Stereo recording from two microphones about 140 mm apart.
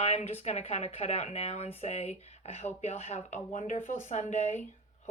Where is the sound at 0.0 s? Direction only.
50° left (ahead or behind).